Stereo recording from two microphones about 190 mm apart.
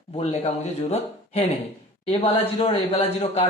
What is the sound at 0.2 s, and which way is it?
Speech, 35° left (ahead or behind).